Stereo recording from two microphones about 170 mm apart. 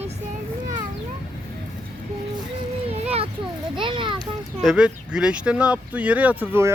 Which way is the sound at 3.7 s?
30° right (ahead or behind).